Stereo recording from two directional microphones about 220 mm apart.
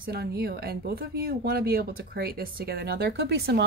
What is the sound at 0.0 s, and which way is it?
Speech, 45° right (ahead or behind).